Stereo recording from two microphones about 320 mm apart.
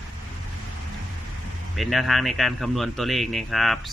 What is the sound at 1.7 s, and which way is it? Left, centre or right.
A man's voice, centre.